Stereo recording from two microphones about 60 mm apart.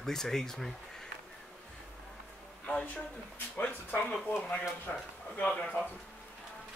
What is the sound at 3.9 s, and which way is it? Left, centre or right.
Speech, left.